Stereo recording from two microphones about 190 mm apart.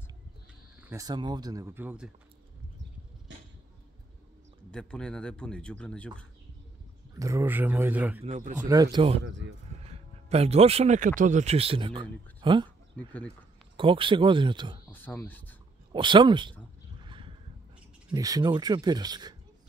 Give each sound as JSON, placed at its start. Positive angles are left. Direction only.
{"t": 0.7, "sound": "speech", "side_deg": -15}
{"t": 4.6, "sound": "speech", "side_deg": 5}
{"t": 7.2, "sound": "speech", "side_deg": -15}
{"t": 8.2, "sound": "speech", "side_deg": -40}
{"t": 8.5, "sound": "speech", "side_deg": -20}
{"t": 9.2, "sound": "a man's voice", "side_deg": -75}
{"t": 9.8, "sound": "speech", "side_deg": -35}
{"t": 13.7, "sound": "speech", "side_deg": -25}
{"t": 14.9, "sound": "speech", "side_deg": 10}
{"t": 15.9, "sound": "speech", "side_deg": -25}
{"t": 17.0, "sound": "a sound", "side_deg": -25}
{"t": 18.1, "sound": "speech", "side_deg": -20}